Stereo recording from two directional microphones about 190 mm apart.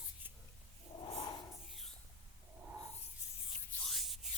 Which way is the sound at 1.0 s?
20° left (ahead or behind).